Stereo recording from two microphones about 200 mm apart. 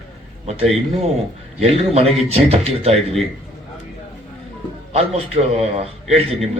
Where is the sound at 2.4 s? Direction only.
30° right (ahead or behind).